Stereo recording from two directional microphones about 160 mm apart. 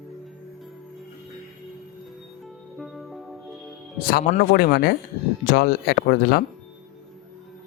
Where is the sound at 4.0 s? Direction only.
70° left (ahead or behind).